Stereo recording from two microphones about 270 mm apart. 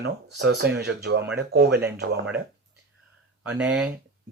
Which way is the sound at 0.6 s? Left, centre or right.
Right.